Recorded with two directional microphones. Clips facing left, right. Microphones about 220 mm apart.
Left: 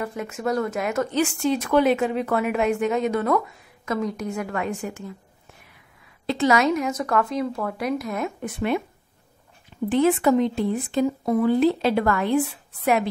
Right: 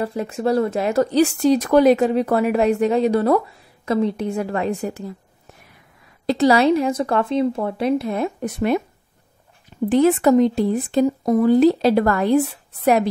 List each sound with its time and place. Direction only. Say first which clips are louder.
0.0 s a woman's voice: right 5 dB; 35° right (ahead or behind)
6.2 s a woman's voice: right 5 dB; 35° right (ahead or behind)
9.8 s a woman's voice: right 4 dB; 40° right (ahead or behind)